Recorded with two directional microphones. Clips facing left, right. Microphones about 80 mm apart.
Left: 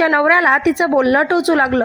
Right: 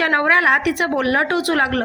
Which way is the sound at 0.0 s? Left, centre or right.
Left.